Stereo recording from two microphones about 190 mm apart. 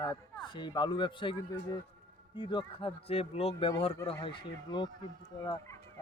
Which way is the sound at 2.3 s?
25° left (ahead or behind).